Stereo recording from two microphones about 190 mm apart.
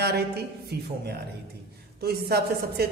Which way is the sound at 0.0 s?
60° right (ahead or behind).